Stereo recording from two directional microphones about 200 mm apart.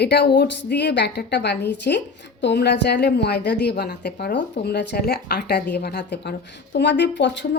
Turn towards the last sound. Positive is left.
turn(degrees=60)  # may be behind; listen again after turning